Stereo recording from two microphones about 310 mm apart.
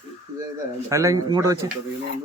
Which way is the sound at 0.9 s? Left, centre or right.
Centre.